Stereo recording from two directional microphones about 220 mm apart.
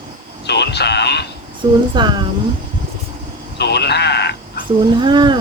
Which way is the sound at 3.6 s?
50° left (ahead or behind).